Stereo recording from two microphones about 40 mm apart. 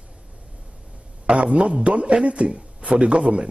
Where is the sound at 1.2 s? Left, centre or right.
Right.